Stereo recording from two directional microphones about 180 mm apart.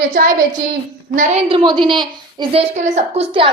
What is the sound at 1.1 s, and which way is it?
Speech, 45° right (ahead or behind).